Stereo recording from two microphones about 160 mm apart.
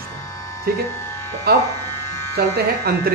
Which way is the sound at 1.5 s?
80° right.